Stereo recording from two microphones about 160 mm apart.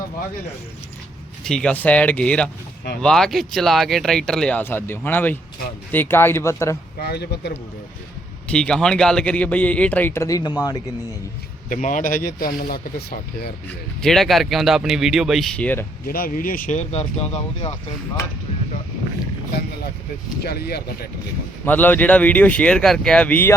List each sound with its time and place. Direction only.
1.5 s speech: 5° left (ahead or behind)
7.0 s speech: 90° left
8.4 s speech: 5° left (ahead or behind); by 10.5 s 20° left (ahead or behind)
11.7 s speech: 55° left (ahead or behind); by 13.5 s 70° left (ahead or behind)
14.0 s speech: centre (ahead or behind)
16.0 s speech: 65° left (ahead or behind); by 17.7 s 40° left (ahead or behind)
20.4 s speech: 80° left
21.6 s speech: 10° left (ahead or behind)